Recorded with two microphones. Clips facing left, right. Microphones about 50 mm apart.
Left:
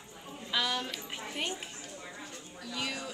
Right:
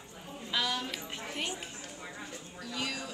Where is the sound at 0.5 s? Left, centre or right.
Centre.